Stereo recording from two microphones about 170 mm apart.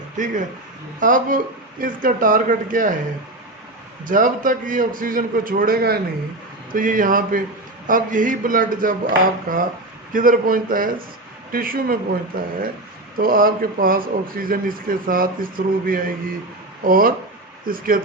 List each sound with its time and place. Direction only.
0.2 s speech: 50° right (ahead or behind)
4.0 s a man's voice: 50° right (ahead or behind)